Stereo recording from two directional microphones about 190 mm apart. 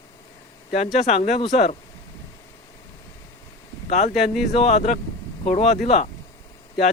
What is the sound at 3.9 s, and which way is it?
Speech, 35° left (ahead or behind).